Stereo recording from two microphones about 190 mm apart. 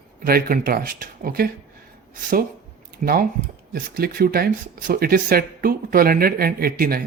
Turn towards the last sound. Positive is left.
turn(degrees=-50)  # may be behind; listen again after turning